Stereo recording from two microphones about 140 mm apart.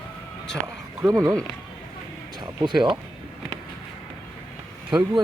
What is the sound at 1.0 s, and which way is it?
Speech, 25° right (ahead or behind).